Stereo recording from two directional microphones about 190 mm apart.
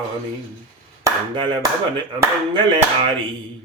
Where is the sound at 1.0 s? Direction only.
25° right (ahead or behind).